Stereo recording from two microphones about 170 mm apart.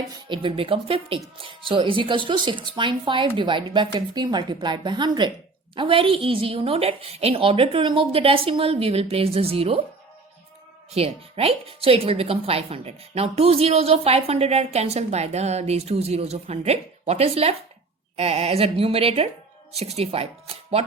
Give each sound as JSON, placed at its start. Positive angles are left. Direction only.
{"t": 0.1, "sound": "a woman's voice", "side_deg": -30}
{"t": 10.9, "sound": "speech", "side_deg": -35}